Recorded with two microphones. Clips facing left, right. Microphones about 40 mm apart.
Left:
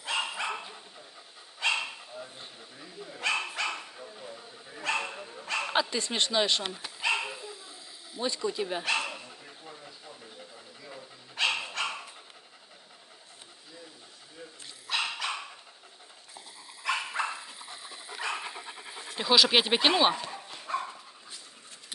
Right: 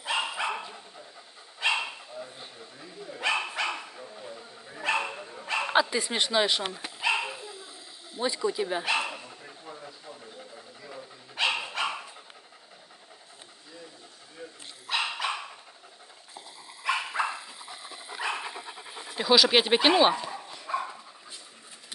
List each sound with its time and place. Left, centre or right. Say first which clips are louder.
0.0 s dog: right 2 dB; centre
3.2 s dog: right 2 dB; centre
8.2 s speech: right 3 dB; centre
8.8 s bow-wow: right 2 dB; centre
10.9 s dog: right 3 dB; centre
14.4 s dog: right 3 dB; centre
16.8 s dog: right 2 dB; centre
18.4 s pant: right 2 dB; centre
18.9 s speech: right 2 dB; centre
20.6 s dog: right 2 dB; centre